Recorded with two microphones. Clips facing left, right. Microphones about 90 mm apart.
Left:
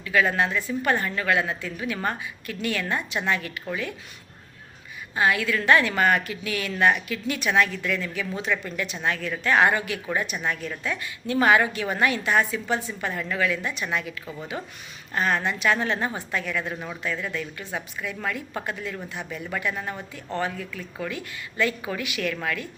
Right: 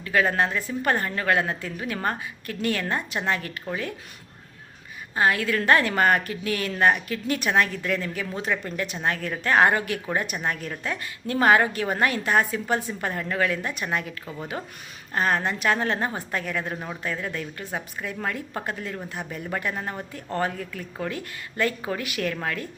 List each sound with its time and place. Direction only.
0.0 s a woman's voice: 40° right (ahead or behind)
5.1 s a woman's voice: 40° right (ahead or behind)
15.1 s a woman's voice: 40° right (ahead or behind)